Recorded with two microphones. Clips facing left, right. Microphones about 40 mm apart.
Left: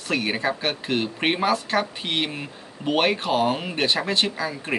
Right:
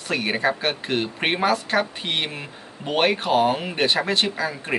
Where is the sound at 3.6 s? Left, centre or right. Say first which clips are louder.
Right 2 dB; centre.